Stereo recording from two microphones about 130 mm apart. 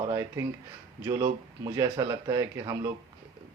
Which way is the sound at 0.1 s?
25° right (ahead or behind).